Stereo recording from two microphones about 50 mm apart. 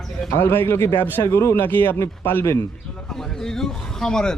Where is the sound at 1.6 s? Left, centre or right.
Left.